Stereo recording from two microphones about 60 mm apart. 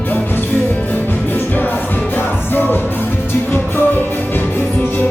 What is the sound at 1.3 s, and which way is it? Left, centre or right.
Music, left.